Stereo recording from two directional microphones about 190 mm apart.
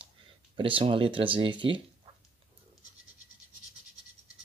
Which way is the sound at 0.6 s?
30° right (ahead or behind).